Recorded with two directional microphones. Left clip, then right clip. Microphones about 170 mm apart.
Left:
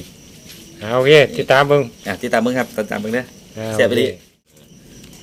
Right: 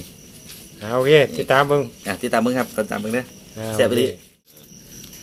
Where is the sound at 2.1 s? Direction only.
Centre (ahead or behind).